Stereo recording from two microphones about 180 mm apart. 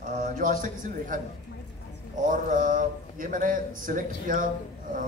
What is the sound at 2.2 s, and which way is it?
Speech, 45° right (ahead or behind).